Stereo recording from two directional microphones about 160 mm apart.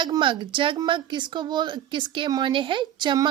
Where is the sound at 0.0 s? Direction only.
30° right (ahead or behind).